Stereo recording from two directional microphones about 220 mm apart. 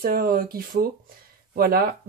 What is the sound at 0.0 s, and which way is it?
Speech, 40° right (ahead or behind).